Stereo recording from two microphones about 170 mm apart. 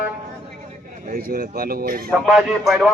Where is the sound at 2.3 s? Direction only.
Centre (ahead or behind).